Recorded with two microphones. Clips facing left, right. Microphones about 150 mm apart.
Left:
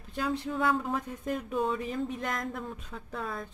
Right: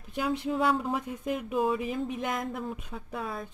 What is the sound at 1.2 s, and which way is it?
Speech, 5° right (ahead or behind).